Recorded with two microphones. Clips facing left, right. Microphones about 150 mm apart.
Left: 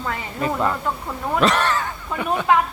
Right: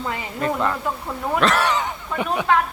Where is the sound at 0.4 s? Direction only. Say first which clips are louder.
Left 1 dB; 10° left (ahead or behind).